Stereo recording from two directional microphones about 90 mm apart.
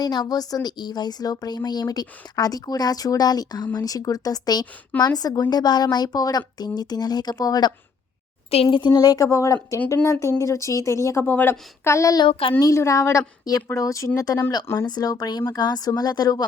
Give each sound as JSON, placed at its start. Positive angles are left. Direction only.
{"t": 0.0, "sound": "speech", "side_deg": 50}
{"t": 8.7, "sound": "speech", "side_deg": 55}
{"t": 12.2, "sound": "a child's voice", "side_deg": 85}
{"t": 12.5, "sound": "speech", "side_deg": 35}